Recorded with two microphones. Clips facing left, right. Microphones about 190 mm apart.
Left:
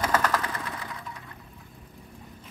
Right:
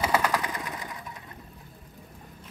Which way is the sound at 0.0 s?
10° right (ahead or behind).